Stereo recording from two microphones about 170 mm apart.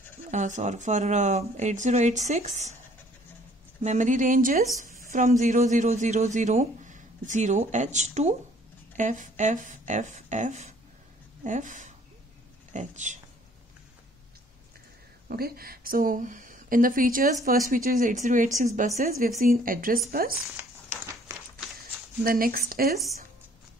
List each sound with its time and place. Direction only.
0.3 s speech: 45° right (ahead or behind)
3.8 s speech: 45° right (ahead or behind)
15.2 s a woman's voice: 60° right (ahead or behind)
21.3 s run: 20° right (ahead or behind)
21.7 s speech: 60° right (ahead or behind)